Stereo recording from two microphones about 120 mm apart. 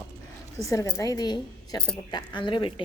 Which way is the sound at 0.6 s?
25° left (ahead or behind).